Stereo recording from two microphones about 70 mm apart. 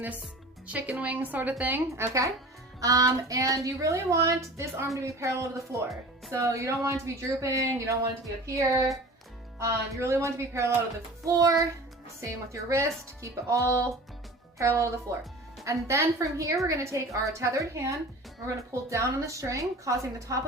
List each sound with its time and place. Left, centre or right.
0.7 s a woman's voice: right
2.0 s speech: right